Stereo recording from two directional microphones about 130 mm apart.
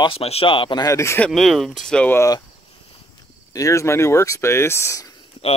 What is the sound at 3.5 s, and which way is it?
Speech, 25° left (ahead or behind).